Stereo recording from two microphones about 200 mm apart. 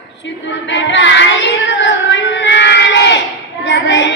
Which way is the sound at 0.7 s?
65° left (ahead or behind).